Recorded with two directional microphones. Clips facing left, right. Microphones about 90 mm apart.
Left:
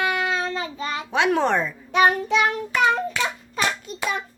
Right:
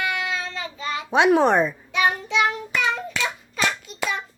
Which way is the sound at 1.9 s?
45° left (ahead or behind).